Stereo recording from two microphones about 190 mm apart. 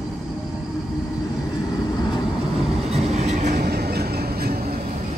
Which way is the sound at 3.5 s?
55° right (ahead or behind).